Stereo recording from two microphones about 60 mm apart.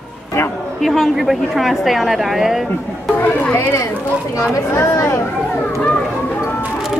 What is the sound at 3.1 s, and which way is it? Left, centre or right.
Speech, left.